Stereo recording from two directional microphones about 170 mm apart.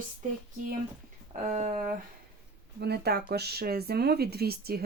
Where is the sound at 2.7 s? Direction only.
70° right (ahead or behind).